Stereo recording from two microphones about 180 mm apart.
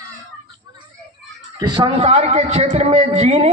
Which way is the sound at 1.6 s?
25° right (ahead or behind).